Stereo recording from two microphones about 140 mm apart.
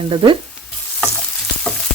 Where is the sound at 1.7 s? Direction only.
5° left (ahead or behind).